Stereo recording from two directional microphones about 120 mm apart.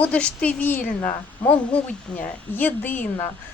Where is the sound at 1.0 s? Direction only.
30° left (ahead or behind).